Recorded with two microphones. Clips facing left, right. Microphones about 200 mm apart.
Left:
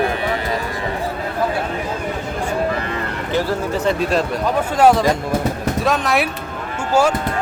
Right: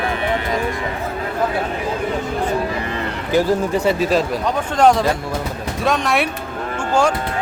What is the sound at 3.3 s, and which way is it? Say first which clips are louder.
Speech: right 4 dB; 10° right (ahead or behind).